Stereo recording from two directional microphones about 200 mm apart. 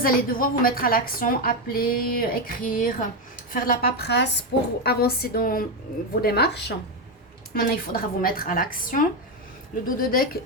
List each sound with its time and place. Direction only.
0.0 s a woman's voice: 45° left (ahead or behind)